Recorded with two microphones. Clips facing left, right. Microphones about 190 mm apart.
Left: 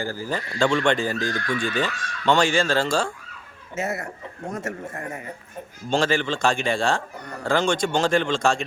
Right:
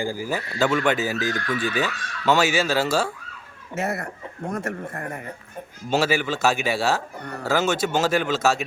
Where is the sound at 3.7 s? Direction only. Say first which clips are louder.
Right 1 dB; 60° right (ahead or behind).